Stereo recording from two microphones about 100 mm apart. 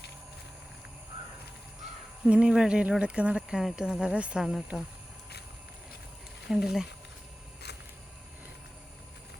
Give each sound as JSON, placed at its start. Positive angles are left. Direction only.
{"t": 2.2, "sound": "speech", "side_deg": -10}
{"t": 6.5, "sound": "speech", "side_deg": -5}